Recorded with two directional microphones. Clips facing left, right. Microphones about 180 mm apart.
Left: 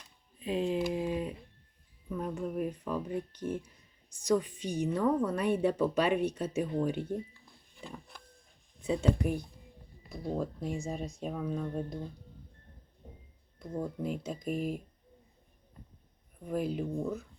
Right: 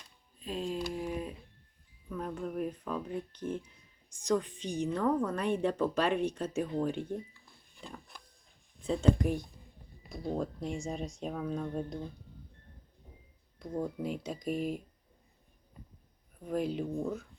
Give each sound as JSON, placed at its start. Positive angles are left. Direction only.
{"t": 0.4, "sound": "speech", "side_deg": 20}
{"t": 0.9, "sound": "a sound", "side_deg": 20}
{"t": 2.0, "sound": "speech", "side_deg": 10}
{"t": 7.8, "sound": "a sound", "side_deg": 5}
{"t": 8.8, "sound": "speech", "side_deg": 5}
{"t": 13.6, "sound": "speech", "side_deg": 0}
{"t": 16.4, "sound": "speech", "side_deg": 5}